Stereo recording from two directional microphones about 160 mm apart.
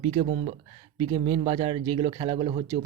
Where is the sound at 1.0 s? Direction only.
35° right (ahead or behind).